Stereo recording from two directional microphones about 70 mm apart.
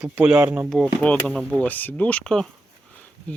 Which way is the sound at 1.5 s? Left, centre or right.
Left.